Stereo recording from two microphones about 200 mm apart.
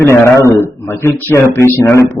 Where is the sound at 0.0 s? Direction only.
15° left (ahead or behind).